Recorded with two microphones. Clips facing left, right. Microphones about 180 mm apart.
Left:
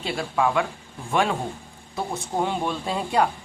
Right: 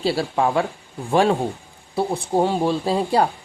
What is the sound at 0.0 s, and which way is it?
Speech, 35° right (ahead or behind).